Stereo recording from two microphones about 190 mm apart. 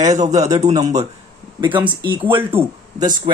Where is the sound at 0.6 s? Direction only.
35° right (ahead or behind).